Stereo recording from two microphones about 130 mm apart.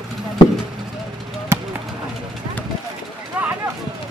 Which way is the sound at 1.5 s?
20° right (ahead or behind).